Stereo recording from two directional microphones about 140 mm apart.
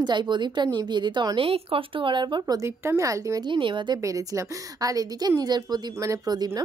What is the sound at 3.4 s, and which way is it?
A woman's voice, 35° right (ahead or behind).